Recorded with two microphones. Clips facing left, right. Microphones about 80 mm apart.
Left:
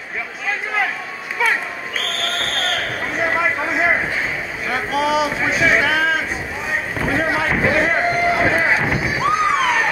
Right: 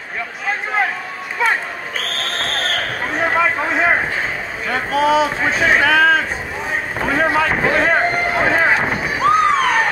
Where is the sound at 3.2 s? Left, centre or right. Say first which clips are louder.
Right 2 dB; right.